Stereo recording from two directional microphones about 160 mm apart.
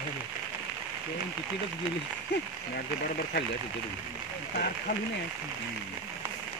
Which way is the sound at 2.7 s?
75° left (ahead or behind).